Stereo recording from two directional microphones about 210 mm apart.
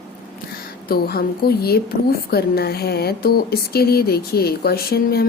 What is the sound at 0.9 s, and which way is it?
A woman's voice, 45° left (ahead or behind).